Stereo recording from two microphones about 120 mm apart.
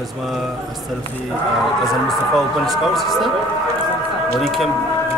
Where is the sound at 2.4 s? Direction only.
Centre (ahead or behind).